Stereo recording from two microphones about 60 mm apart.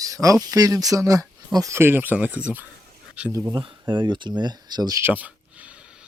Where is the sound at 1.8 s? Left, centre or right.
Right.